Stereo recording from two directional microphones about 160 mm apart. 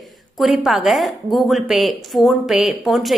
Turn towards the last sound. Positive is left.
turn(degrees=0)  # may be behind; listen again after turning